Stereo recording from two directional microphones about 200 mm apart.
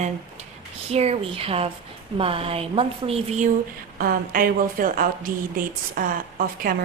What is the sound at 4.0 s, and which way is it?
Speech, 45° right (ahead or behind).